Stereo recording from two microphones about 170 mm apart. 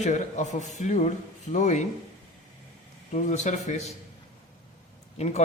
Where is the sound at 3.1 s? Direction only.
45° left (ahead or behind).